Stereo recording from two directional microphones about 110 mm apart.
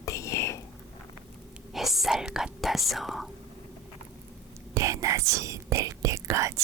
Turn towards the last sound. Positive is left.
turn(degrees=-30)  # may be behind; listen again after turning